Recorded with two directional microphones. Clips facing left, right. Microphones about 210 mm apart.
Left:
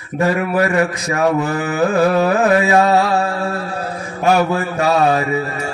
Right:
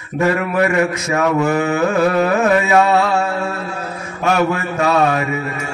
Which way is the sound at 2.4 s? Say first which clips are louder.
Even; 35° left (ahead or behind).